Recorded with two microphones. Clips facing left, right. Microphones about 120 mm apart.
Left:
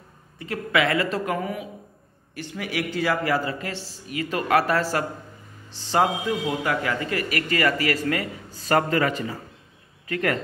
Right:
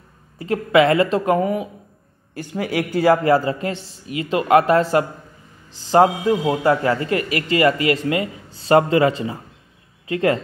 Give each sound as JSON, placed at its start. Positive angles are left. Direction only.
{"t": 0.4, "sound": "a man's voice", "side_deg": -30}
{"t": 2.8, "sound": "a man's voice", "side_deg": -45}
{"t": 5.9, "sound": "a man's voice", "side_deg": -35}